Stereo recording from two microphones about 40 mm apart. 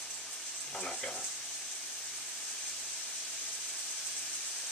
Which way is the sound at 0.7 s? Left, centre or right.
Centre.